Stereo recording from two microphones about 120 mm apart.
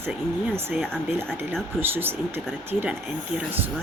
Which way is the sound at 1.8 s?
15° right (ahead or behind).